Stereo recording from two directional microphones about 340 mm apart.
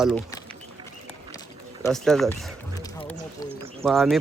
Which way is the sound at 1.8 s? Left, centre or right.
Centre.